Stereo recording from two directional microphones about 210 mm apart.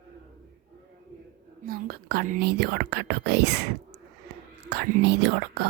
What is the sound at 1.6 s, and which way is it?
Speech, 45° right (ahead or behind).